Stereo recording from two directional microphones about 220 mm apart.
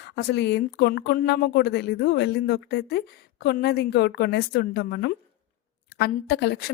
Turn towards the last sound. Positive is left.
turn(degrees=50)  # may be behind; listen again after turning